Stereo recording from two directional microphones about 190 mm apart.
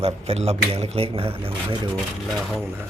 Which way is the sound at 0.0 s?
35° right (ahead or behind).